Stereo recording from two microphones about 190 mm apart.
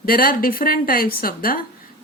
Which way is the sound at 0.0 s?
50° left (ahead or behind).